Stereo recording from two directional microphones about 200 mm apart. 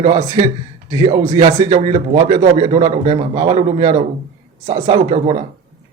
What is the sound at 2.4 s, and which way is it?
A man's voice, 35° right (ahead or behind).